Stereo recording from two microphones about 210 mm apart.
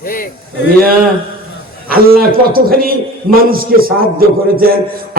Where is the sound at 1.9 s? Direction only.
45° right (ahead or behind).